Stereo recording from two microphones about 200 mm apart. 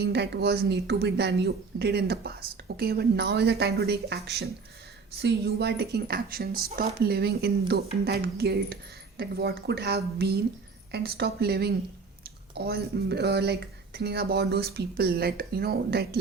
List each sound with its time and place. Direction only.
0.0 s a woman's voice: 55° right (ahead or behind)